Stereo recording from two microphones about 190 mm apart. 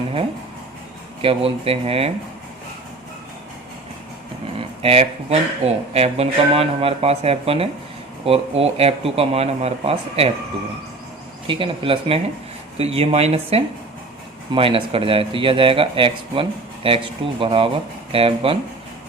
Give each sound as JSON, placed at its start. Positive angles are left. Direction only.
{"t": 1.2, "sound": "speech", "side_deg": -30}
{"t": 4.8, "sound": "speech", "side_deg": -30}
{"t": 11.4, "sound": "speech", "side_deg": -25}